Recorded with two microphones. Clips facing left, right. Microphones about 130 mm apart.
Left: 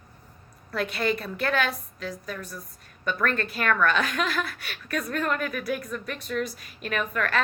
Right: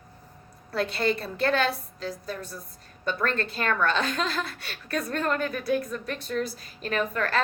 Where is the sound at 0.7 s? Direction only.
30° right (ahead or behind).